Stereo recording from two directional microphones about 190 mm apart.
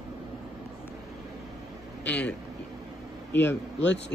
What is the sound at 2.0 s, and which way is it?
Speech, 5° left (ahead or behind).